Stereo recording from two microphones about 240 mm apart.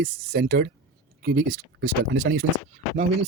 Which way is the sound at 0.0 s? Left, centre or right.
Right.